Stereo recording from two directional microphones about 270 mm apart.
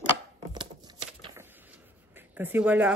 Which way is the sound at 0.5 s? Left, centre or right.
Centre.